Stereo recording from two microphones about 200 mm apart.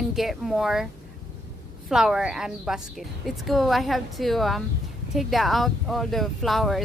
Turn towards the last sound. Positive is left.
turn(degrees=0)  # may be behind; listen again after turning